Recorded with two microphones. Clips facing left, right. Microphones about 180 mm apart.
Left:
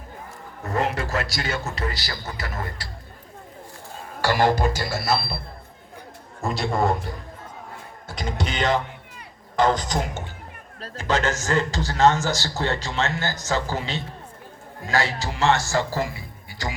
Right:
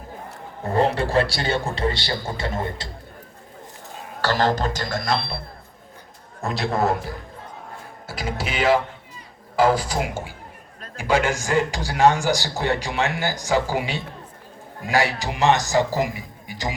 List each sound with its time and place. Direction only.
0.6 s speech: 30° right (ahead or behind)
4.2 s speech: 10° left (ahead or behind)
6.4 s a man's voice: centre (ahead or behind); by 16.7 s 15° right (ahead or behind)